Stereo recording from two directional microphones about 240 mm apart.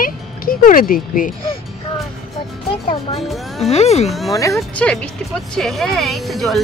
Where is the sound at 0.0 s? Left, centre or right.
Left.